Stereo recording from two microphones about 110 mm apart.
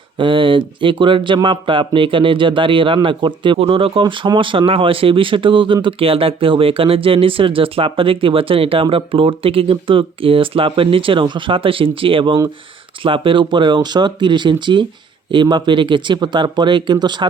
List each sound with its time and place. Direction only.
0.2 s speech: 50° right (ahead or behind)
4.0 s speech: 45° right (ahead or behind)